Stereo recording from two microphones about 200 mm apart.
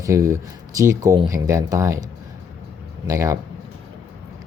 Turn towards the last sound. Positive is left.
turn(degrees=-15)  # may be behind; listen again after turning